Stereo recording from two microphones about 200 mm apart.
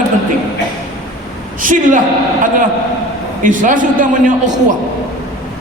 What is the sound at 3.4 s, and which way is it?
A man's voice, 40° right (ahead or behind).